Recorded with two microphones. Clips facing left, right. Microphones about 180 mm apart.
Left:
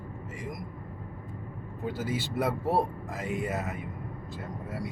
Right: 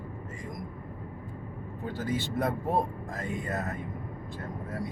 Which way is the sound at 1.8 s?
5° left (ahead or behind).